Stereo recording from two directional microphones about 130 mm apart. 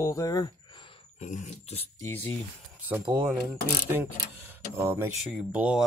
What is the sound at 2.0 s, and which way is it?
Speech, 20° left (ahead or behind).